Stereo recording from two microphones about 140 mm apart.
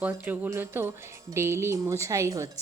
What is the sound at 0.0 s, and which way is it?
Music, 10° right (ahead or behind).